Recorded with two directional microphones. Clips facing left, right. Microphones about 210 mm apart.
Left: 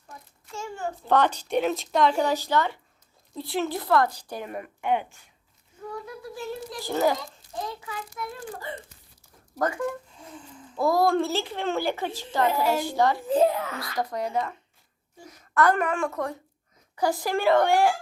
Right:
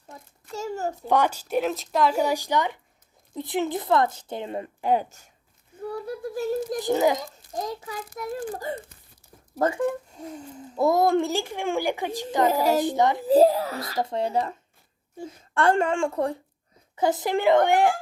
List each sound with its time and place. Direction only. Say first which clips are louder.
0.4 s a sound: right 4 dB; 40° right (ahead or behind)
1.0 s a woman's voice: left 1 dB; 10° right (ahead or behind); by 6.7 s 45° right (ahead or behind)
6.7 s a woman's voice: right 1 dB; 15° right (ahead or behind)
7.5 s a child's voice: right 3 dB; 40° right (ahead or behind)
9.6 s speech: right 4 dB; 25° right (ahead or behind)
10.2 s a child's voice: right 7 dB; 40° right (ahead or behind)
10.8 s a woman's voice: right 2 dB; 20° right (ahead or behind)
12.5 s a child's voice: right 3 dB; 40° right (ahead or behind)
12.8 s speech: right 2 dB; 20° right (ahead or behind)
13.2 s a child's voice: right 5 dB; 35° right (ahead or behind); by 17.9 s 20° right (ahead or behind)